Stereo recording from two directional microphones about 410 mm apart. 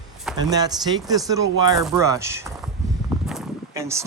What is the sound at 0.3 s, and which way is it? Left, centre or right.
Speech, centre.